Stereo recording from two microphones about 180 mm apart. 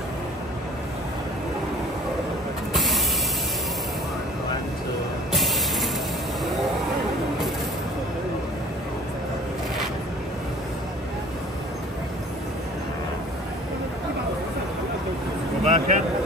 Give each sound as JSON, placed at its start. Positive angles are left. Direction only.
{"t": 2.7, "sound": "mechanisms", "side_deg": 0}
{"t": 5.3, "sound": "music", "side_deg": 0}
{"t": 15.6, "sound": "a sound", "side_deg": -45}